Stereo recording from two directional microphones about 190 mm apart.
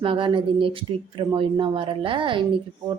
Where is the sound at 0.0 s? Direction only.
25° right (ahead or behind).